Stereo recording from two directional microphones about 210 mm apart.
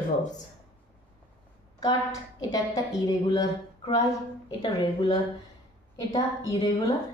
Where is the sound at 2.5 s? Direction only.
20° left (ahead or behind).